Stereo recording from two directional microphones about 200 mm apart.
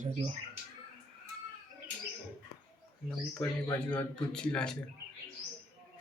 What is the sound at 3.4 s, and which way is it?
Speech, 10° left (ahead or behind).